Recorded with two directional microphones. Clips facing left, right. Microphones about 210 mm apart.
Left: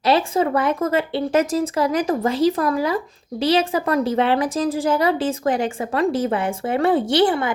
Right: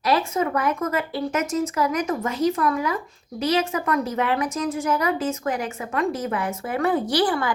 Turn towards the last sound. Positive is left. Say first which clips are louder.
# left 4 dB
turn(degrees=25)  # may be behind; listen again after turning